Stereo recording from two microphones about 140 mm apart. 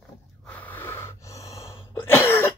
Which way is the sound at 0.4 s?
10° left (ahead or behind).